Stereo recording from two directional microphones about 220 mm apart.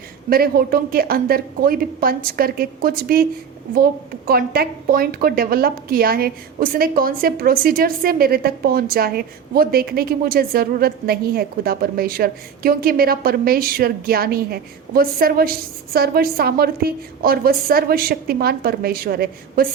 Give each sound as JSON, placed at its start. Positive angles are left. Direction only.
{"t": 0.3, "sound": "a woman's voice", "side_deg": -40}
{"t": 4.3, "sound": "a woman's voice", "side_deg": -45}